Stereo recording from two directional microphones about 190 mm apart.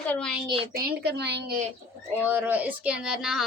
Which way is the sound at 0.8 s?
55° right (ahead or behind).